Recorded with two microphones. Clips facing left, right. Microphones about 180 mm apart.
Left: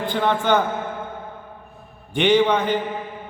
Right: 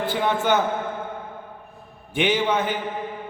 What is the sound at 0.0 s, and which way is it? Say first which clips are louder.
Speech: left 1 dB; 5° right (ahead or behind).